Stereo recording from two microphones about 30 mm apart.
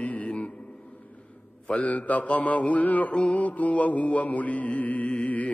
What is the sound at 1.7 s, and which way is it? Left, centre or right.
Mantra, left.